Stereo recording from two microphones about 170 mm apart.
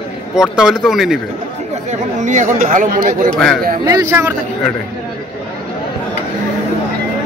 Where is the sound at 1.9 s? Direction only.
45° right (ahead or behind).